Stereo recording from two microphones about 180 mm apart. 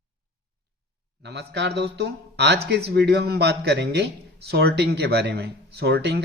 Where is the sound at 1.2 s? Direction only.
70° right (ahead or behind).